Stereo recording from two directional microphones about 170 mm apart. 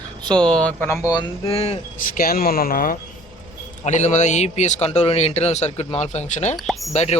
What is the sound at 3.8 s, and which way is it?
A man's voice, 45° left (ahead or behind).